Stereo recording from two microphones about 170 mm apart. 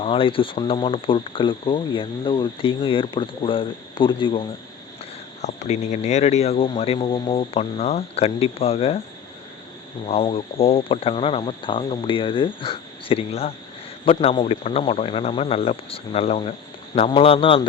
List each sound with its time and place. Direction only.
0.0 s speech: 30° left (ahead or behind)
5.4 s speech: 40° left (ahead or behind)
10.1 s speech: 35° left (ahead or behind)